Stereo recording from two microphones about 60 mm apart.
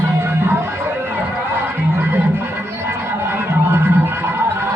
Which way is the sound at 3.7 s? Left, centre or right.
Right.